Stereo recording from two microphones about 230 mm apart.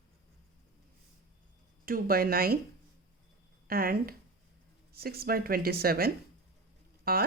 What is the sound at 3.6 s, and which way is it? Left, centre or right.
Speech, right.